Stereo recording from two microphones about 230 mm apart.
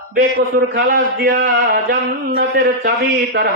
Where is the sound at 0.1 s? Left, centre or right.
Right.